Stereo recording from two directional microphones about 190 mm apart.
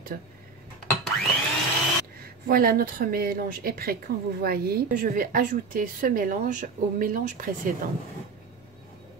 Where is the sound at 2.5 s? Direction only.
50° right (ahead or behind).